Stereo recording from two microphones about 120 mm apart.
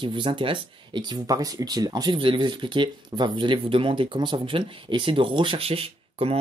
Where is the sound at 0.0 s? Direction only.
45° right (ahead or behind).